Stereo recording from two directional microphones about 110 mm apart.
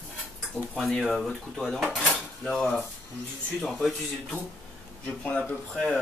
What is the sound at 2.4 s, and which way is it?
Speech, 5° left (ahead or behind).